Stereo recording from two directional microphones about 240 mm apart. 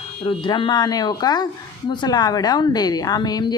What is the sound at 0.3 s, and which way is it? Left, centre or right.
A woman's voice, centre.